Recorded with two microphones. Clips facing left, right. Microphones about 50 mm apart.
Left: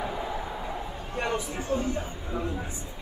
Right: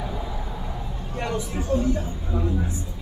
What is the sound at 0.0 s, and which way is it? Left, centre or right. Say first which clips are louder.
Vehicle: left 1 dB; centre.